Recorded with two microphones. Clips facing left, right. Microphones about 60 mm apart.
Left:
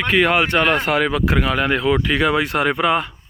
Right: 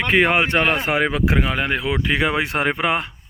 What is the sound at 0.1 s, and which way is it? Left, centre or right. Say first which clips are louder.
Speech: left 1 dB; right.